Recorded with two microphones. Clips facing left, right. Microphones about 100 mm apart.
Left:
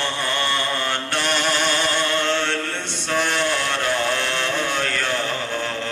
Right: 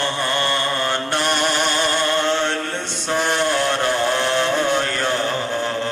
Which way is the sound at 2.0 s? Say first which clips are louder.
Right 2 dB; 15° right (ahead or behind).